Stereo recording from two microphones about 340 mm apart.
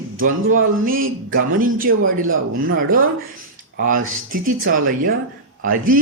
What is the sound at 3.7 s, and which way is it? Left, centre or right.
Speech, right.